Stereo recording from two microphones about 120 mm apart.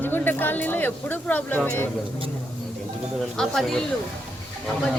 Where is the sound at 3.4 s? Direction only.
5° left (ahead or behind).